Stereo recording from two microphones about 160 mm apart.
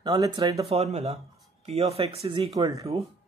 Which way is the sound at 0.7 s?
40° right (ahead or behind).